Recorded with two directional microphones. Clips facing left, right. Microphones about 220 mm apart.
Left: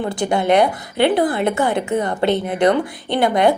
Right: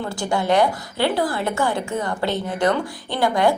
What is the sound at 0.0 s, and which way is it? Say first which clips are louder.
A woman's voice: left 4 dB; 20° left (ahead or behind).